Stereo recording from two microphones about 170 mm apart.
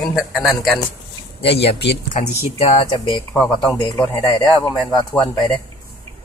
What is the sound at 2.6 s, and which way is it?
Speech, 35° left (ahead or behind).